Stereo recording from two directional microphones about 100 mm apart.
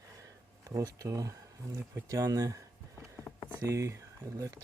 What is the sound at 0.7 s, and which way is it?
Speech, 35° right (ahead or behind).